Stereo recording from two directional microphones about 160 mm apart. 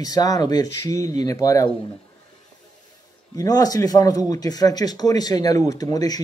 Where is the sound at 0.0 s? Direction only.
25° left (ahead or behind).